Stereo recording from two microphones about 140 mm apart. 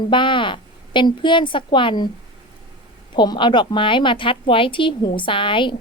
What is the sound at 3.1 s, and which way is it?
A woman's voice, 35° left (ahead or behind).